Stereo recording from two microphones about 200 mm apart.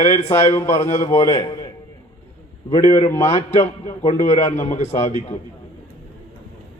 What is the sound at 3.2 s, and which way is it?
Speech, 35° left (ahead or behind).